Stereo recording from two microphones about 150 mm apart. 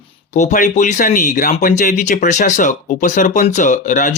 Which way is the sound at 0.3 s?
55° left (ahead or behind).